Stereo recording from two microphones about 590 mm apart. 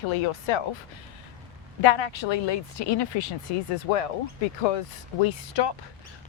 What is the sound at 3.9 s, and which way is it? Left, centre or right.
Speech, left.